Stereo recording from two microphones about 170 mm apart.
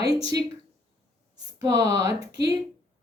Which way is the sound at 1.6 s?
20° right (ahead or behind).